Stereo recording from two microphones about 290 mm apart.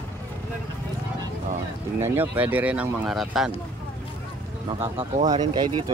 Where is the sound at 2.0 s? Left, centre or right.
Centre.